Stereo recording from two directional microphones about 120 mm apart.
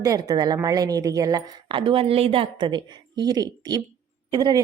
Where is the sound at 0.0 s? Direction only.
30° right (ahead or behind).